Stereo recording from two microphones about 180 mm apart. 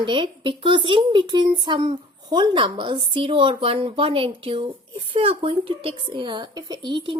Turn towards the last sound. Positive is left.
turn(degrees=-25)  # may be behind; listen again after turning